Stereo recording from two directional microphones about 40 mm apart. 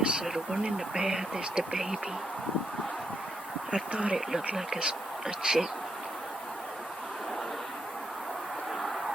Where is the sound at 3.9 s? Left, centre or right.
Right.